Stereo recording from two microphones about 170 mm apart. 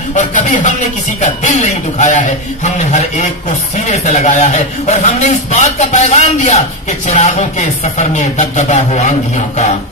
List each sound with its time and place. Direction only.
0.1 s speech: 45° left (ahead or behind)